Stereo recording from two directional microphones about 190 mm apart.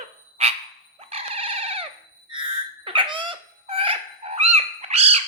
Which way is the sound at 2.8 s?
25° right (ahead or behind).